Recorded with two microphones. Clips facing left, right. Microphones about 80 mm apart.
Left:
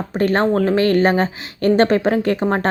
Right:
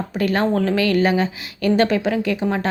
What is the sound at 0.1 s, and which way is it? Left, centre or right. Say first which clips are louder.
Speech: left 3 dB; left.